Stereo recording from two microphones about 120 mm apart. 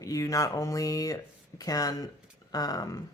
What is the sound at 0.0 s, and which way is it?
Speech, 25° left (ahead or behind).